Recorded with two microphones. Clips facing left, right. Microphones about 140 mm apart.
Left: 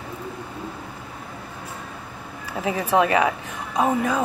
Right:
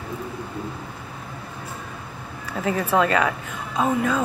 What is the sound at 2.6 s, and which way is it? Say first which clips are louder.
Speech: even; 15° left (ahead or behind).